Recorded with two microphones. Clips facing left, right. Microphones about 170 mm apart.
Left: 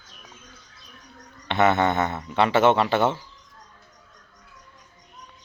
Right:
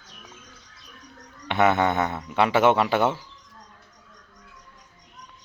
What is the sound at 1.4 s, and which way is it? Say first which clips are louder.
Speech: even; 10° right (ahead or behind).